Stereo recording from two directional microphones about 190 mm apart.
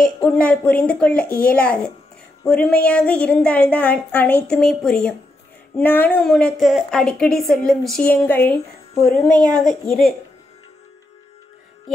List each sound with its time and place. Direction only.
0.2 s a woman's voice: 10° left (ahead or behind)
9.3 s speech: 20° right (ahead or behind)
9.6 s a woman's voice: centre (ahead or behind)